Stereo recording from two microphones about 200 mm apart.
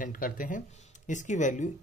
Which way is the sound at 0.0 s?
45° left (ahead or behind).